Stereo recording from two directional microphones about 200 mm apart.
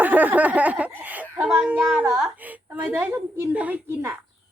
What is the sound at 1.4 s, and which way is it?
A woman's voice, 5° right (ahead or behind).